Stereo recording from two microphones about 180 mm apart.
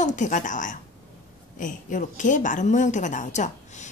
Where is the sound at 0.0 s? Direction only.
45° left (ahead or behind).